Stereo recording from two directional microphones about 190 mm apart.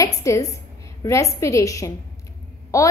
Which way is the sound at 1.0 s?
15° left (ahead or behind).